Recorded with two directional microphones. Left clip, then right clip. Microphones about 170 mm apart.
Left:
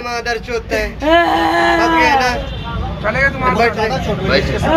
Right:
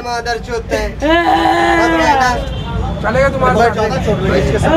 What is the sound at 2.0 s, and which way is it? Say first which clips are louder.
Speech: right 1 dB; 30° left (ahead or behind).